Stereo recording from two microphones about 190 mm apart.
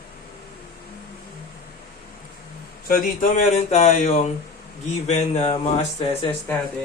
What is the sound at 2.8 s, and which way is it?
Speech, 45° left (ahead or behind).